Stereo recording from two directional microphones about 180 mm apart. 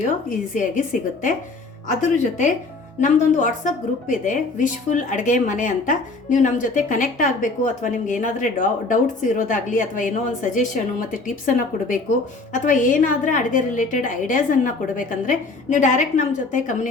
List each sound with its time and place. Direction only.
0.0 s a woman's voice: 45° left (ahead or behind)